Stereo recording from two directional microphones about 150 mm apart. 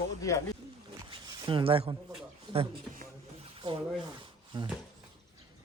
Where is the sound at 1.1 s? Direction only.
30° right (ahead or behind).